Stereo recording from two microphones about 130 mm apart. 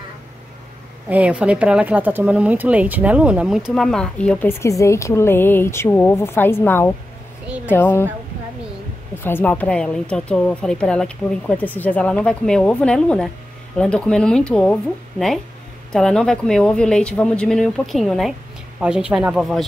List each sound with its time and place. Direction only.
1.0 s speech: 10° right (ahead or behind); by 7.0 s 15° left (ahead or behind)
7.4 s speech: 10° right (ahead or behind)
7.7 s a woman's voice: 15° left (ahead or behind)
9.2 s a woman's voice: 15° left (ahead or behind)